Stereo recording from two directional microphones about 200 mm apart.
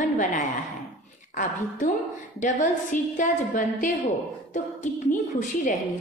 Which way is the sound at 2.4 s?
40° left (ahead or behind).